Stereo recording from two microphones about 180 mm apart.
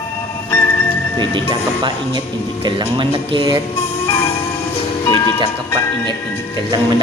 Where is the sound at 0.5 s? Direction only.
15° left (ahead or behind).